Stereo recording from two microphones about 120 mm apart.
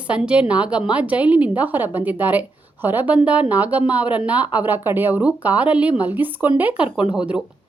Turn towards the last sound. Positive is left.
turn(degrees=-5)  # may be behind; listen again after turning